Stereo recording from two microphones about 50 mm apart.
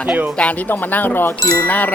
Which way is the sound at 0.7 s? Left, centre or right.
Left.